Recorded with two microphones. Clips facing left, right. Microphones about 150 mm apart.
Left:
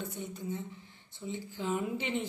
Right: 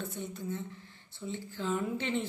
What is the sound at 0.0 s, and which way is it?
Speech, 15° left (ahead or behind).